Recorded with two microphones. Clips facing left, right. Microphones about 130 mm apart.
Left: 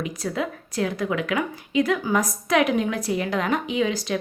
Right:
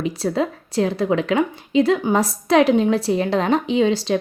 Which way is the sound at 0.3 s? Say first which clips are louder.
Right 4 dB; 30° right (ahead or behind).